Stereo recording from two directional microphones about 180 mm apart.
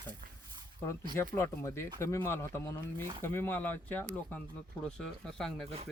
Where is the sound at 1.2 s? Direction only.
15° left (ahead or behind).